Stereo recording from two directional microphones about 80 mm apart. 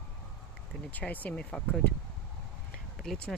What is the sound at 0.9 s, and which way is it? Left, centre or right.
Speech, centre.